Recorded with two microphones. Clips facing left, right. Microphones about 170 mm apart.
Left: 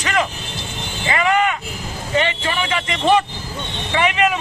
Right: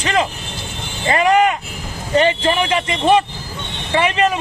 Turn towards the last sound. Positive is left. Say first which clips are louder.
# right 2 dB
turn(degrees=-35)  # may be behind; listen again after turning